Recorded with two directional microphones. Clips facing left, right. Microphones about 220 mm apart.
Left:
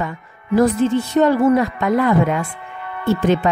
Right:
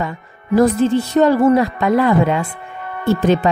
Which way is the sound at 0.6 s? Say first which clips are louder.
Right 2 dB; 35° right (ahead or behind).